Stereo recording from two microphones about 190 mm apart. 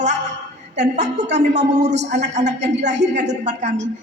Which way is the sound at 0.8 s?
40° right (ahead or behind).